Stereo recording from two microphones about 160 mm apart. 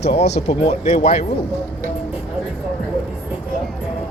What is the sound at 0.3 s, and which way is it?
Speech, 45° left (ahead or behind).